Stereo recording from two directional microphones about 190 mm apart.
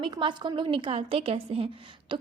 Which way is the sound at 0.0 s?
25° right (ahead or behind).